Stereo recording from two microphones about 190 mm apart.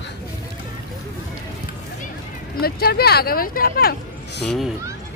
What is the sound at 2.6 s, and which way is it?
Speech, 55° left (ahead or behind).